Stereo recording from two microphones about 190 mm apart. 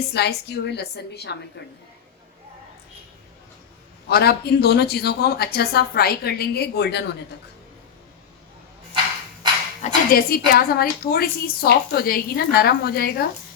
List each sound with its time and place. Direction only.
0.1 s a woman's voice: 60° left (ahead or behind)
4.1 s a woman's voice: 55° left (ahead or behind)
9.8 s a woman's voice: 50° left (ahead or behind)